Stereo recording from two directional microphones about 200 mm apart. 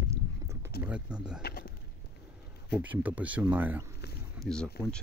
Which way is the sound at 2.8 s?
10° right (ahead or behind).